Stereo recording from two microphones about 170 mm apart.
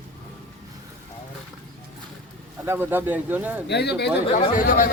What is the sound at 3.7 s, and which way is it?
Speech, 80° left.